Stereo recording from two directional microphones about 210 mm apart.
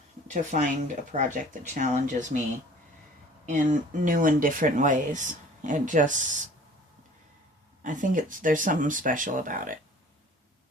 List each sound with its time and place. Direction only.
0.3 s speech: 35° right (ahead or behind)
3.4 s speech: 35° right (ahead or behind)
7.8 s speech: 40° right (ahead or behind)